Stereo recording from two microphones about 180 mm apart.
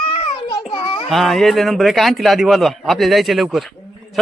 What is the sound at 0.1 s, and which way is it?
Child singing, 30° left (ahead or behind).